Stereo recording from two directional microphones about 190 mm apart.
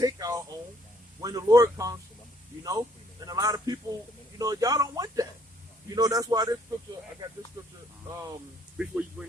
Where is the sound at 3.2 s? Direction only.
20° right (ahead or behind).